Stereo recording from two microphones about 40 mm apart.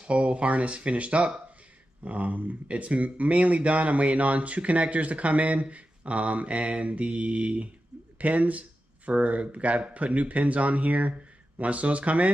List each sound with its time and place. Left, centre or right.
0.0 s speech: right